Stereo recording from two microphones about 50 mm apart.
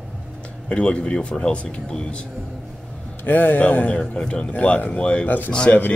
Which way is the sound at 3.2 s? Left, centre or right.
Left.